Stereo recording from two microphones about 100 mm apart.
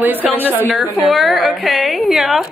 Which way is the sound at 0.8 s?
Centre (ahead or behind).